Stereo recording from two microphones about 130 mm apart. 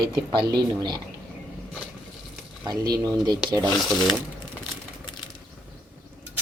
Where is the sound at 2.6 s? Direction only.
30° right (ahead or behind).